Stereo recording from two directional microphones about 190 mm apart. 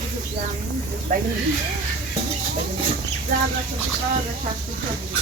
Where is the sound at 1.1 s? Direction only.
45° right (ahead or behind).